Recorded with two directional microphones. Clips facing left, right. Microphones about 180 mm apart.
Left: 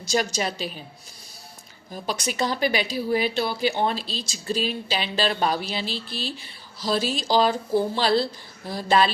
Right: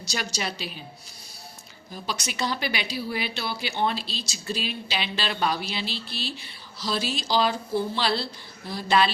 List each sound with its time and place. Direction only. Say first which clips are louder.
0.1 s speech: left 7 dB; 45° left (ahead or behind)
1.9 s speech: left 4 dB; 45° left (ahead or behind)